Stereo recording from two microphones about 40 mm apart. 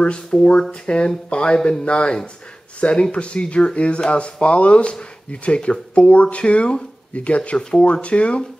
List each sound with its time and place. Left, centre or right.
0.0 s speech: left